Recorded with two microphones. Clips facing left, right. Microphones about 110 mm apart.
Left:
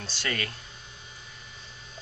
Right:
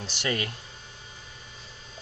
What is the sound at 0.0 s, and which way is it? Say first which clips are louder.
Speech: right 3 dB; 20° right (ahead or behind).